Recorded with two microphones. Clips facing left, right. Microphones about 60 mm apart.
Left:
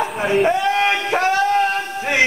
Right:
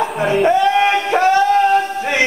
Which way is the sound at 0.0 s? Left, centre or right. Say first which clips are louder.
Right 2 dB; centre.